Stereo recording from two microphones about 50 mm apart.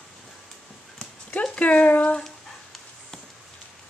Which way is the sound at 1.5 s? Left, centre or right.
Left.